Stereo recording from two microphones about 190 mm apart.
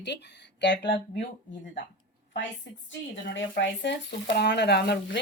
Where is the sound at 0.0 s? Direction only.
65° left (ahead or behind).